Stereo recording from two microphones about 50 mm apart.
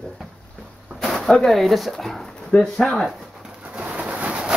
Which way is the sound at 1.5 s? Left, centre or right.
Centre.